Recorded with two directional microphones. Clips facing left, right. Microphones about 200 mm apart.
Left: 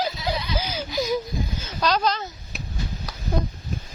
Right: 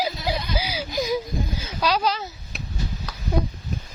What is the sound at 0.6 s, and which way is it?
Whimper, 5° right (ahead or behind).